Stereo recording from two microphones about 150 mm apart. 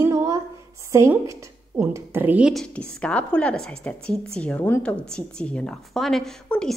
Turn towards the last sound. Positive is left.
turn(degrees=5)  # may be behind; listen again after turning